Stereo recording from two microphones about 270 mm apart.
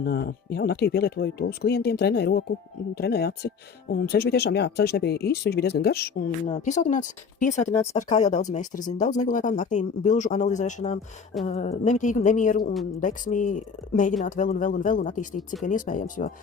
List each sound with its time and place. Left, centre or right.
0.0 s speech: left